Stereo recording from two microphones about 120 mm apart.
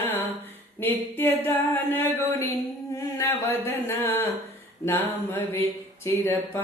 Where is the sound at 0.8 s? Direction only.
20° left (ahead or behind).